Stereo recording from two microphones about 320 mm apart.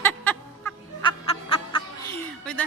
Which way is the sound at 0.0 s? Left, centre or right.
Centre.